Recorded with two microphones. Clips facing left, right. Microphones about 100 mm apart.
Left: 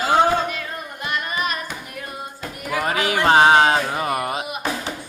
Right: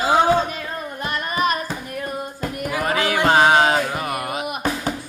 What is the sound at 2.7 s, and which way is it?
Music, 20° left (ahead or behind).